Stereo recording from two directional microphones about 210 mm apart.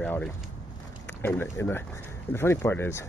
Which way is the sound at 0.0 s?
5° left (ahead or behind).